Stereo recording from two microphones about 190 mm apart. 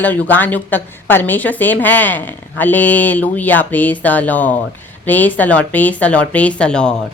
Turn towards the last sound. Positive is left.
turn(degrees=5)  # may be behind; listen again after turning